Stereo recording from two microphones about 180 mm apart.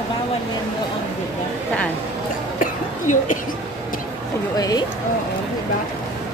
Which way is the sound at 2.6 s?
45° left (ahead or behind).